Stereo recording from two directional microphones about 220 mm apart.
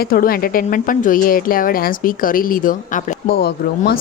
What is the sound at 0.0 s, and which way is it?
Speech, 40° left (ahead or behind).